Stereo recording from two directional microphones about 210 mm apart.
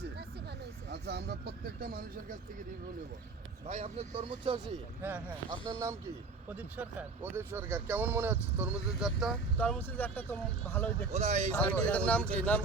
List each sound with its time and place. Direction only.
0.9 s speech: 50° right (ahead or behind)
3.7 s speech: 30° right (ahead or behind)
6.5 s speech: 5° right (ahead or behind)
9.6 s speech: 10° left (ahead or behind)
11.1 s speech: 35° right (ahead or behind)
11.5 s speech: 5° left (ahead or behind)